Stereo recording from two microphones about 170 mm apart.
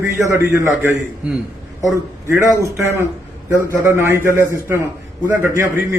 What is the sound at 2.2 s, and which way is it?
A man's voice, 15° right (ahead or behind).